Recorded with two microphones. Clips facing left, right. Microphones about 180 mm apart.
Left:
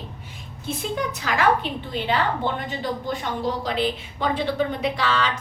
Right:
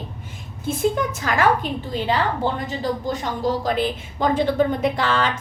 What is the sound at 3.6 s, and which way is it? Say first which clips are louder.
A woman's voice: right 2 dB; 45° right (ahead or behind).